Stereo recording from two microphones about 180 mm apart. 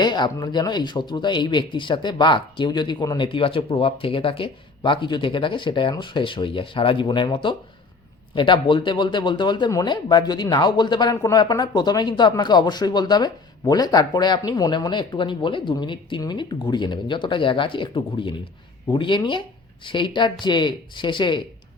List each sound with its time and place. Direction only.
0.0 s speech: 25° left (ahead or behind)